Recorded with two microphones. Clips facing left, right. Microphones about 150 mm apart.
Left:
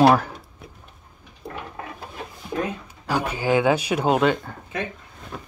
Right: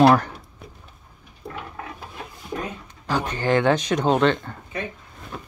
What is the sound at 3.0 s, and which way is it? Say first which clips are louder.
Speech: even; 10° left (ahead or behind).